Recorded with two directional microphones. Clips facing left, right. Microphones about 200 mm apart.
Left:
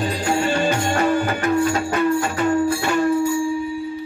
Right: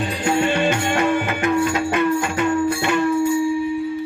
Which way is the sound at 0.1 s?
35° left (ahead or behind).